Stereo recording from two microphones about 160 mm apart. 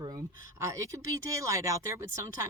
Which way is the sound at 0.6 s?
20° right (ahead or behind).